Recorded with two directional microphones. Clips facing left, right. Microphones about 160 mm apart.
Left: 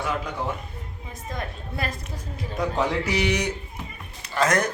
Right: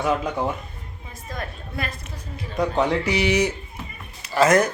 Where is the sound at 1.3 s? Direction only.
20° left (ahead or behind).